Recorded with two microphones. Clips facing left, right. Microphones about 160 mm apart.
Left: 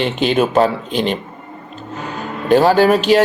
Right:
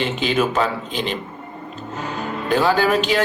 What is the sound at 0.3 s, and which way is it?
Speech, 35° left (ahead or behind).